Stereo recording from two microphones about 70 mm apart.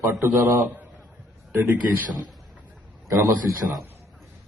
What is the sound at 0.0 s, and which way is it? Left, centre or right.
Speech, right.